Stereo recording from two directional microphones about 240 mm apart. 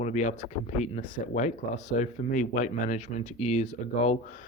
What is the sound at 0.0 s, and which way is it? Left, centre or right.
Speech, left.